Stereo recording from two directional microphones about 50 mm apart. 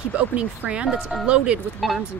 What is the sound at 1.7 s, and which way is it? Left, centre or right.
Speech, centre.